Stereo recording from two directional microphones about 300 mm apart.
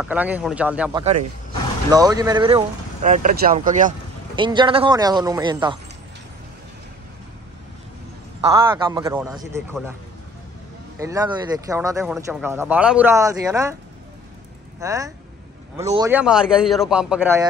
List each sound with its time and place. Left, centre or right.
0.0 s a man's voice: centre
8.4 s speech: centre
11.0 s speech: centre
14.8 s a man's voice: centre